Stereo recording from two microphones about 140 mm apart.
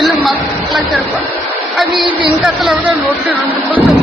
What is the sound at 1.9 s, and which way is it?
Speech, 35° right (ahead or behind).